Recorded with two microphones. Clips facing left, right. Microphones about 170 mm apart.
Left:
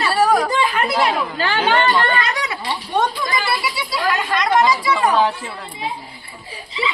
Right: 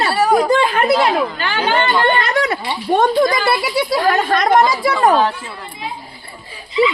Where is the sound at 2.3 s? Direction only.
50° right (ahead or behind).